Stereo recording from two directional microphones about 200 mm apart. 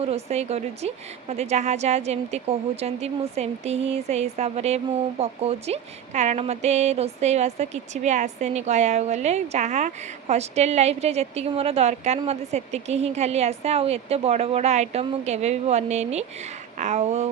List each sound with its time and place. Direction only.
0.0 s a woman's voice: 30° right (ahead or behind)